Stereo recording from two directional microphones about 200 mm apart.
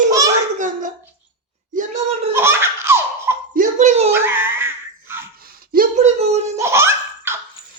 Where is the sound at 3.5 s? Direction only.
40° right (ahead or behind).